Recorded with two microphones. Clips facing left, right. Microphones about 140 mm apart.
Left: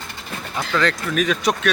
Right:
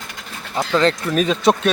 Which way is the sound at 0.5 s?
25° right (ahead or behind).